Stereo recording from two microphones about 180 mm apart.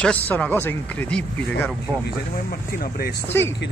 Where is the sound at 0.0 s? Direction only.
5° left (ahead or behind).